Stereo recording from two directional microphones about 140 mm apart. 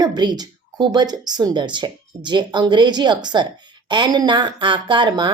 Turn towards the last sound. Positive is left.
turn(degrees=-30)  # may be behind; listen again after turning